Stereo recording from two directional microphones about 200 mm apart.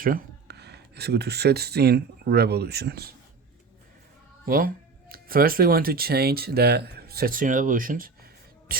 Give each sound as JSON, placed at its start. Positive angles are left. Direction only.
{"t": 0.0, "sound": "speech", "side_deg": -45}
{"t": 4.4, "sound": "speech", "side_deg": -45}